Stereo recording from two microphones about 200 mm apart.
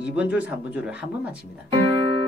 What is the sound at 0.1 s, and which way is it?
Speech, 5° right (ahead or behind).